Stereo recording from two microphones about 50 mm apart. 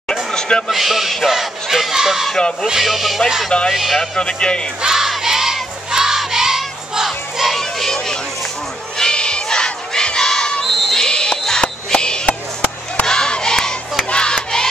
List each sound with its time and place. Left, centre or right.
0.1 s a sound: centre
0.7 s speech: centre
3.4 s speech: centre
3.7 s speech: centre
4.0 s speech: centre
4.8 s crowd: centre
7.8 s a sound: centre
8.9 s crowd: centre
10.7 s a sound: centre
11.1 s music: centre
12.3 s chop: left
13.0 s crowd: centre